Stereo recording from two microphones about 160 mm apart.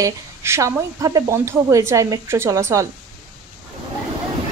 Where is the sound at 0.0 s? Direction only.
20° right (ahead or behind).